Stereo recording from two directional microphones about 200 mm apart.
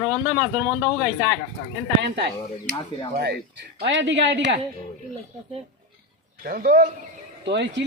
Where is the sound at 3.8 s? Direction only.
65° right (ahead or behind).